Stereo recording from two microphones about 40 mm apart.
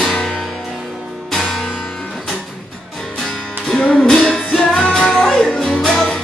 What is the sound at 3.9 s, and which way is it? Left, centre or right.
Music, centre.